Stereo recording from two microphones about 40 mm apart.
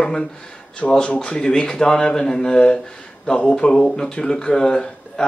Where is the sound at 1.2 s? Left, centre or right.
Centre.